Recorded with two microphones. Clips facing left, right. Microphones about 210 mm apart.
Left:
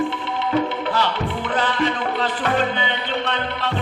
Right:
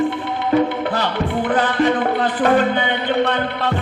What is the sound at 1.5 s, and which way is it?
Music, 50° right (ahead or behind).